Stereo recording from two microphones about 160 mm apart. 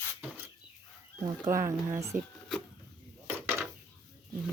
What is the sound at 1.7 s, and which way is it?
Speech, 15° right (ahead or behind).